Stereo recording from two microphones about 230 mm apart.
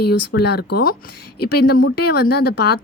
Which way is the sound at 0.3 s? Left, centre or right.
Left.